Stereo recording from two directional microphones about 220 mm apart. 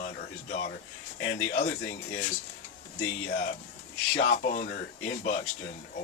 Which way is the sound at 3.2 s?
35° left (ahead or behind).